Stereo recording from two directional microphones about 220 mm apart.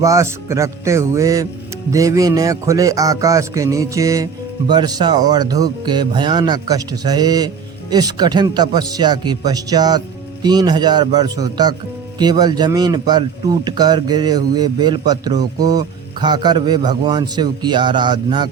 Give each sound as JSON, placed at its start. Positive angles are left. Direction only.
{"t": 0.0, "sound": "a man's voice", "side_deg": -15}